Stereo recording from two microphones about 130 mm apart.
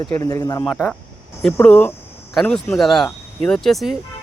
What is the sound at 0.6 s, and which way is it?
Speech, centre (ahead or behind).